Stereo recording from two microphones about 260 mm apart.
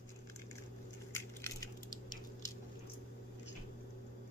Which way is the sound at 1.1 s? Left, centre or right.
Centre.